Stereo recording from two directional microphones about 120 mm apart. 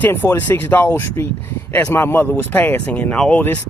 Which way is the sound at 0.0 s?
20° left (ahead or behind).